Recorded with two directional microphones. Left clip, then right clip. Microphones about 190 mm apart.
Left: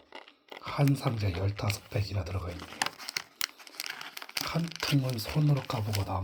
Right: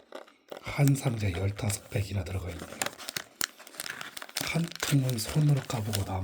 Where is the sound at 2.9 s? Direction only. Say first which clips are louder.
Left 1 dB; 60° right (ahead or behind).